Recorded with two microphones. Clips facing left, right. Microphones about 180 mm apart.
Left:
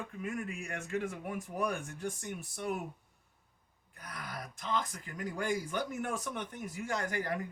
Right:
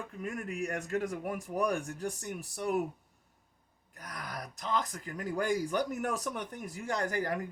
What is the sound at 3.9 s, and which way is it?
Speech, 40° right (ahead or behind).